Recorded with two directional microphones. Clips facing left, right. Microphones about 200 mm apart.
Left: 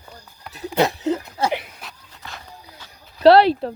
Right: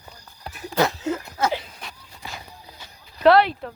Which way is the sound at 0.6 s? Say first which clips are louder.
Left 3 dB; 20° left (ahead or behind).